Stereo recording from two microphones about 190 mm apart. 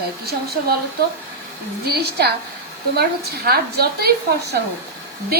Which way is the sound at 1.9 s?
60° right (ahead or behind).